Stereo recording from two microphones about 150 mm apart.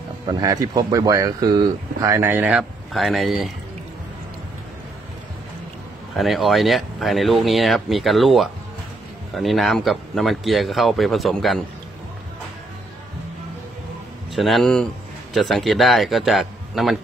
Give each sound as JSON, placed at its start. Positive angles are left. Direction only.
{"t": 0.3, "sound": "speech", "side_deg": -25}
{"t": 6.1, "sound": "speech", "side_deg": 0}
{"t": 14.3, "sound": "speech", "side_deg": 0}